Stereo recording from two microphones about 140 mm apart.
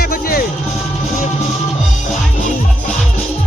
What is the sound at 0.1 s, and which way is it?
Music, 90° left.